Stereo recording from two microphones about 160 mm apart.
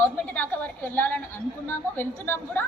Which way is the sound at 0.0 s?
10° left (ahead or behind).